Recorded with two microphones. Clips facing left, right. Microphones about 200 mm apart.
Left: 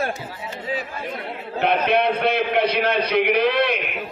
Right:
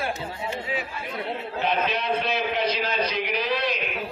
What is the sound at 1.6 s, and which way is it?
A man's voice, 60° left (ahead or behind).